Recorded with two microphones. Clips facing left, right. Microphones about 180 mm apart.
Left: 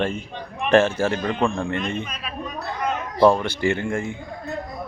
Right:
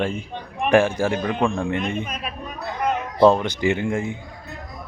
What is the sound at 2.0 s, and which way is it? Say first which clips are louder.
Speech: right 3 dB; 50° right (ahead or behind).